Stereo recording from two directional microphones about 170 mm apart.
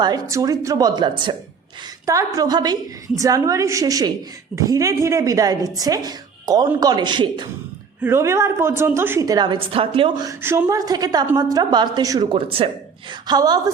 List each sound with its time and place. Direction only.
0.0 s a woman's voice: 20° right (ahead or behind)
8.0 s a woman's voice: 15° right (ahead or behind)